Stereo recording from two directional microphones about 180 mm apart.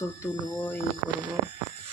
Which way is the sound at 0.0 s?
15° left (ahead or behind).